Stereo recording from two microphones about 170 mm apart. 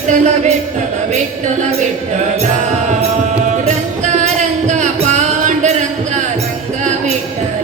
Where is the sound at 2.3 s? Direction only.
45° right (ahead or behind).